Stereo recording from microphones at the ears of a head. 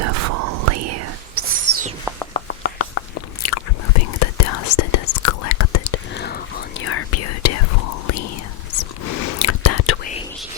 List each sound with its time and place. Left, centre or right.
0.0 s whispering: right
2.3 s biting: left
8.7 s whispering: left